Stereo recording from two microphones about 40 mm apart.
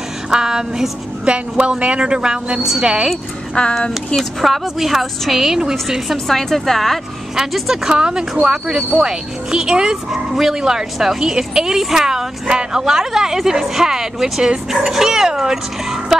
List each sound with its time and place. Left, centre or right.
0.3 s a woman's voice: centre
3.6 s speech: left
4.4 s a woman's voice: centre
6.2 s a woman's voice: centre
7.5 s a woman's voice: centre